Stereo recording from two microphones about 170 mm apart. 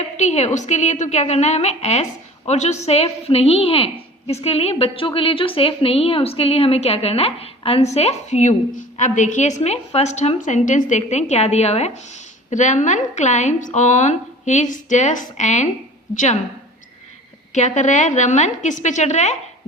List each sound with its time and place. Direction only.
0.2 s a woman's voice: 40° left (ahead or behind)
17.5 s a woman's voice: 45° left (ahead or behind)